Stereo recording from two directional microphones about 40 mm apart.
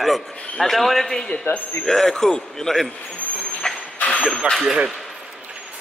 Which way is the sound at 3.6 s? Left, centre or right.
Centre.